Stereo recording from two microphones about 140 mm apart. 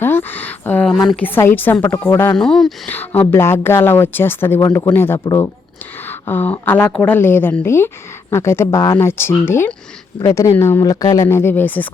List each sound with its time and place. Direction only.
0.0 s a sound: 15° left (ahead or behind)
1.1 s speech: 15° left (ahead or behind)
2.3 s speech: 5° left (ahead or behind)
2.9 s speech: 15° left (ahead or behind)